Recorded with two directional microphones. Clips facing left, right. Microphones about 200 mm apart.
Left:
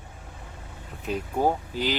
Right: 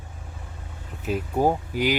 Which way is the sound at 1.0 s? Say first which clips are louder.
Right 2 dB; 10° right (ahead or behind).